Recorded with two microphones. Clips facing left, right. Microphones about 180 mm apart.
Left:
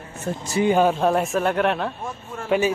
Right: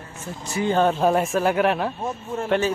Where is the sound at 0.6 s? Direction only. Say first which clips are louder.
Left 2 dB; 15° left (ahead or behind).